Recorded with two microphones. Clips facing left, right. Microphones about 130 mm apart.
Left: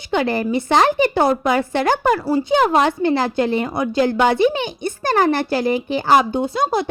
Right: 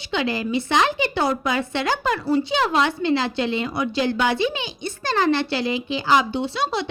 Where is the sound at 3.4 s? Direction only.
50° left (ahead or behind).